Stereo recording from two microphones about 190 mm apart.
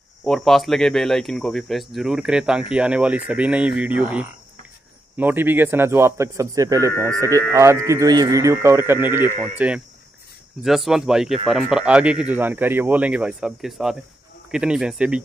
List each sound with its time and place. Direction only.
0.2 s speech: centre (ahead or behind)